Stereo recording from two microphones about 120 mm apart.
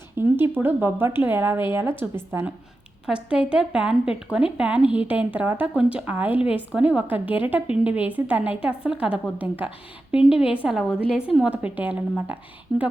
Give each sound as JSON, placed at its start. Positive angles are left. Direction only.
{"t": 0.2, "sound": "a woman's voice", "side_deg": -20}
{"t": 3.1, "sound": "a woman's voice", "side_deg": -10}
{"t": 12.7, "sound": "speech", "side_deg": 0}